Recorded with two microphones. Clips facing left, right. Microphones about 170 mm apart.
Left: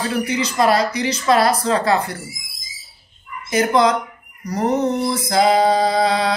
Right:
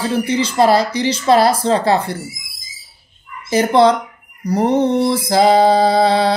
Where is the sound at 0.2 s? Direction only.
30° right (ahead or behind).